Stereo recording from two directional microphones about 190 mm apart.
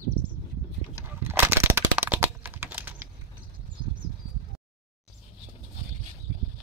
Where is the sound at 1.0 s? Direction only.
10° right (ahead or behind).